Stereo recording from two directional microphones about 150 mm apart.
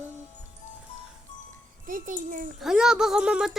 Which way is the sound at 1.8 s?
60° right (ahead or behind).